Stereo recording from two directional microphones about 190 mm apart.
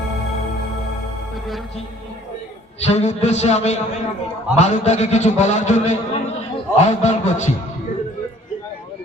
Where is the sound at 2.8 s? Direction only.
35° left (ahead or behind).